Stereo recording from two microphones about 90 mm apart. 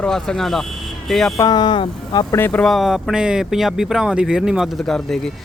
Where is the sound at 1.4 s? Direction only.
50° left (ahead or behind).